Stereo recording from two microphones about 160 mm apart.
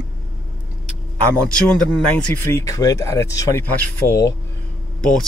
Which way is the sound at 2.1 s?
15° left (ahead or behind).